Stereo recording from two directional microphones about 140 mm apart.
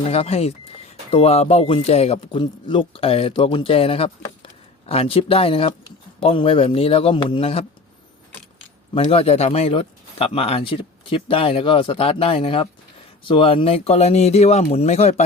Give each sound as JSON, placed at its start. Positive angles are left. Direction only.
{"t": 0.1, "sound": "speech", "side_deg": 45}
{"t": 2.2, "sound": "speech", "side_deg": 35}
{"t": 9.0, "sound": "speech", "side_deg": 45}